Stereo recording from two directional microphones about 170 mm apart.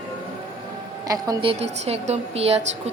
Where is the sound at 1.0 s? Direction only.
20° right (ahead or behind); by 2.9 s 40° right (ahead or behind).